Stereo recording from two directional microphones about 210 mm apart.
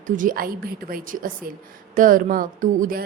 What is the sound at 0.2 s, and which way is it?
A woman's voice, 40° right (ahead or behind).